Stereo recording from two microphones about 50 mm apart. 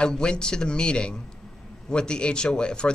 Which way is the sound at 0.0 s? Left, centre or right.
Centre.